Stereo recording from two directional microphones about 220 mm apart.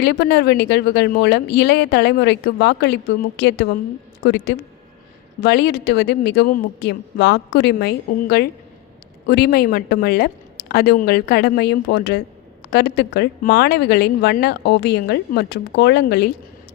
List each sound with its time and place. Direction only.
0.0 s speech: 50° left (ahead or behind)